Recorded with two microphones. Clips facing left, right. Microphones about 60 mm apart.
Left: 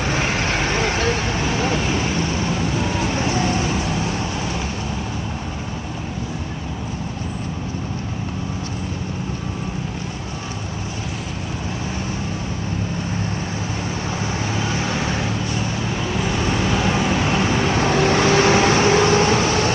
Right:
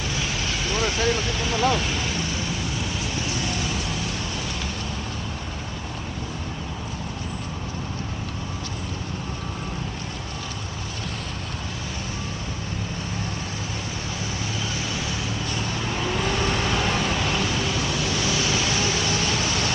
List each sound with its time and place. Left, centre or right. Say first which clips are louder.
0.0 s vehicle: left 7 dB; left
3.0 s vehicle: left 8 dB; left
14.7 s vehicle: left 7 dB; left
15.5 s vehicle: left 4 dB; centre; by 19.7 s left